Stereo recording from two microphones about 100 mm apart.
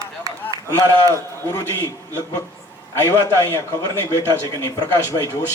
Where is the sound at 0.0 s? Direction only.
35° right (ahead or behind).